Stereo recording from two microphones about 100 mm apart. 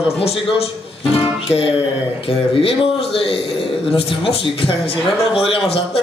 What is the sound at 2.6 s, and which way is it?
A man's voice, 70° left (ahead or behind).